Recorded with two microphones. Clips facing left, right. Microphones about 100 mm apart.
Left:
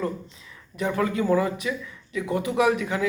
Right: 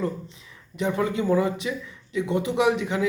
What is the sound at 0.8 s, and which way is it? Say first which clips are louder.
Speech: even; 25° right (ahead or behind).